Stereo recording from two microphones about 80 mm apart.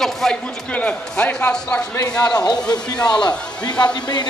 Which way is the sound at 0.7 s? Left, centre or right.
Centre.